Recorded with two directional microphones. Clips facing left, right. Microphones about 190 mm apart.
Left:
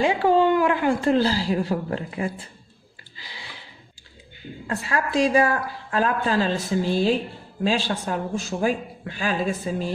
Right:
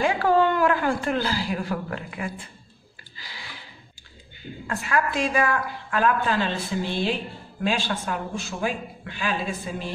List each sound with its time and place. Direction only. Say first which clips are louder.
0.0 s speech: left 2 dB; 25° left (ahead or behind)
3.2 s a sound: even; 25° left (ahead or behind)
4.6 s a woman's voice: right 1 dB; 30° left (ahead or behind)